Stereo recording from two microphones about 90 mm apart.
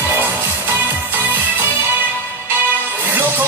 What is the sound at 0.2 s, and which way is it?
Music, 25° right (ahead or behind).